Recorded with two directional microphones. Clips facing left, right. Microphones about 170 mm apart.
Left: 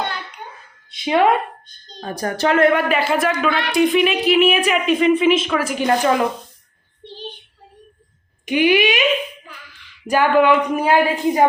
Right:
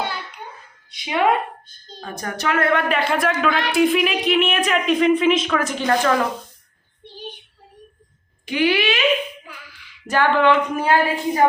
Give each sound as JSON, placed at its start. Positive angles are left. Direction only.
{"t": 0.9, "sound": "a woman's voice", "side_deg": 25}
{"t": 2.0, "sound": "a woman's voice", "side_deg": 35}
{"t": 2.7, "sound": "a woman's voice", "side_deg": 5}
{"t": 8.4, "sound": "speech", "side_deg": 15}
{"t": 10.1, "sound": "speech", "side_deg": 10}